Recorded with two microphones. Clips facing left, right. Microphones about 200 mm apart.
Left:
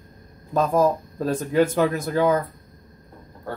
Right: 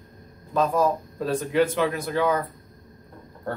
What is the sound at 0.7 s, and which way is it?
Speech, 45° left (ahead or behind).